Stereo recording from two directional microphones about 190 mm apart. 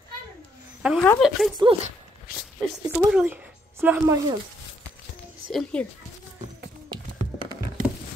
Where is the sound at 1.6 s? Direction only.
25° right (ahead or behind).